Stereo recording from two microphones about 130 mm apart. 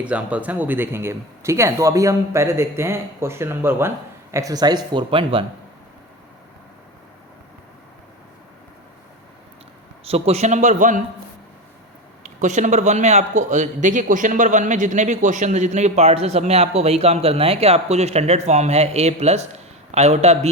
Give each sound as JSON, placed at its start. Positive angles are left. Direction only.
{"t": 0.0, "sound": "speech", "side_deg": -10}
{"t": 10.1, "sound": "a man's voice", "side_deg": -50}
{"t": 12.2, "sound": "a man's voice", "side_deg": -65}